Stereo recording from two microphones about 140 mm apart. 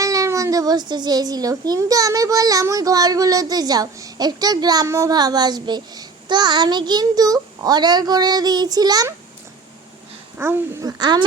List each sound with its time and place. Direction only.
0.0 s a child's voice: 25° right (ahead or behind)
10.3 s a child's voice: 15° right (ahead or behind)